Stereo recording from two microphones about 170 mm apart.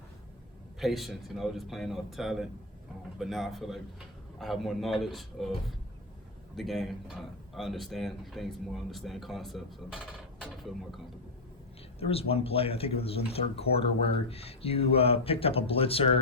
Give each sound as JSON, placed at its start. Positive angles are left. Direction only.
{"t": 0.8, "sound": "speech", "side_deg": 0}
{"t": 11.9, "sound": "speech", "side_deg": 35}